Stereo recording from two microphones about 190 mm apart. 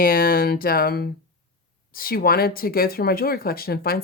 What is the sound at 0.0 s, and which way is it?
Speech, 50° left (ahead or behind).